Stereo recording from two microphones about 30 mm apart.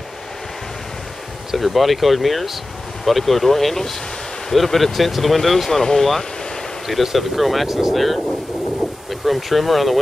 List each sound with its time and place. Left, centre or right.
1.6 s speech: centre
5.8 s speech: centre
6.9 s speech: centre
7.6 s speech: centre
7.9 s speech: centre